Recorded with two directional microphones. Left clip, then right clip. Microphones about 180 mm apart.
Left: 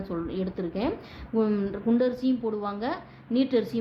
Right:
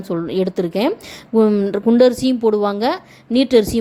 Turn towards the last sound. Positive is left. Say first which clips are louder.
# right 11 dB
turn(degrees=-50)  # may be behind; listen again after turning